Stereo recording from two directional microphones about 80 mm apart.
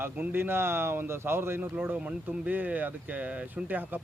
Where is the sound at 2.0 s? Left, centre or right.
Centre.